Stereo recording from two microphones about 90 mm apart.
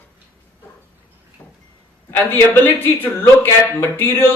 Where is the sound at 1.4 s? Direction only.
25° left (ahead or behind).